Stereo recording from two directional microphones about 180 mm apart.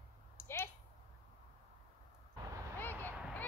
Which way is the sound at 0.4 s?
15° left (ahead or behind).